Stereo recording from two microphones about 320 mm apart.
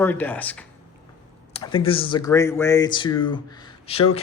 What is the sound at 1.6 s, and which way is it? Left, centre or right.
Speech, centre.